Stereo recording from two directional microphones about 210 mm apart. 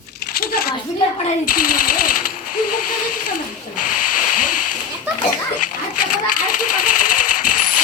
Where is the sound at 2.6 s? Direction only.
90° left.